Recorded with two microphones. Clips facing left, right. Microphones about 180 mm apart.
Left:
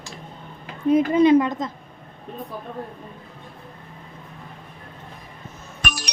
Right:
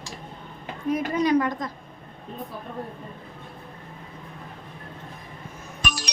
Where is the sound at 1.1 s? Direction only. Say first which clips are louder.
Left 4 dB; 25° left (ahead or behind).